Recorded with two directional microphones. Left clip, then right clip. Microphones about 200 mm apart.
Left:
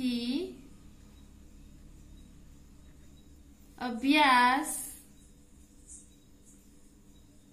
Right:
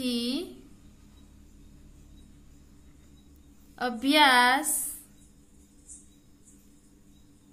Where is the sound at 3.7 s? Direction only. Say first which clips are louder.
Right 3 dB; 35° right (ahead or behind).